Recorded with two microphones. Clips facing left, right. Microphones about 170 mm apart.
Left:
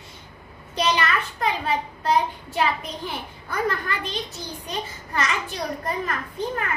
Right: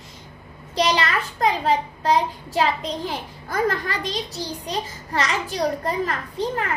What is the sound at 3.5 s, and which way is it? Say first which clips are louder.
Speech: right 3 dB; 35° right (ahead or behind).